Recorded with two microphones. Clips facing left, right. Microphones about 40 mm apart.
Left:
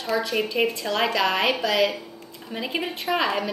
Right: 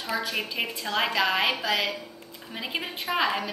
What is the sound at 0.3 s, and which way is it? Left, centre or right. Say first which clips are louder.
A woman's voice: left 7 dB; centre.